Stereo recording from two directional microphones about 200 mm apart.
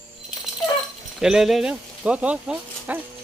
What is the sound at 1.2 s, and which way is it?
Speech, centre (ahead or behind).